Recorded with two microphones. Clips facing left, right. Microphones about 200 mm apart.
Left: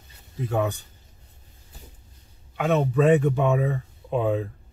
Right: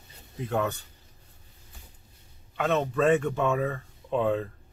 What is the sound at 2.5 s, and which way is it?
Speech, 10° left (ahead or behind).